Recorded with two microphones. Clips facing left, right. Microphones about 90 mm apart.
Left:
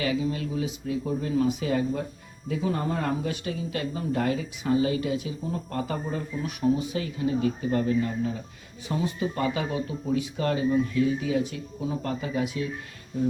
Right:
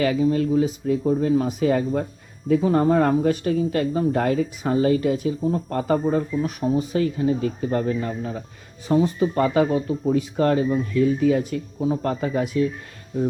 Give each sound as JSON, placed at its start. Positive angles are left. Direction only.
{"t": 0.0, "sound": "speech", "side_deg": -45}